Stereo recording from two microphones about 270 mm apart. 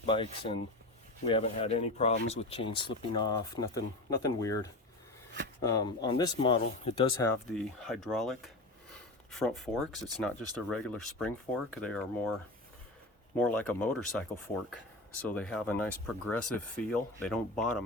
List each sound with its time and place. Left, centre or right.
0.0 s speech: centre
7.3 s speech: centre
8.9 s a sound: centre
10.2 s speech: centre
13.3 s speech: centre